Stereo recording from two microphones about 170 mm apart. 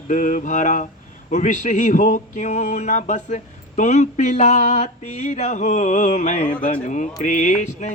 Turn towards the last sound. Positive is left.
turn(degrees=45)  # may be behind; listen again after turning